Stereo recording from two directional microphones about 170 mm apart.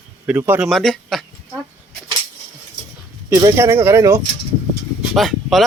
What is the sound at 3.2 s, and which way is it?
Speech, 15° right (ahead or behind).